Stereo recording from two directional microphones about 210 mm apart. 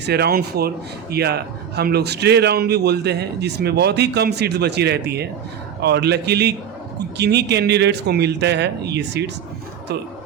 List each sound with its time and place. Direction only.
0.0 s a man's voice: 50° right (ahead or behind)